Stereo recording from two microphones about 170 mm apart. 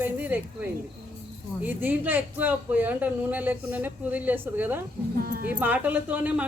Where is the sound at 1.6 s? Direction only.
10° right (ahead or behind).